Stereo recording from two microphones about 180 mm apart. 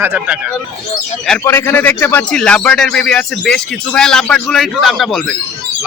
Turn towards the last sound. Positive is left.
turn(degrees=0)  # may be behind; listen again after turning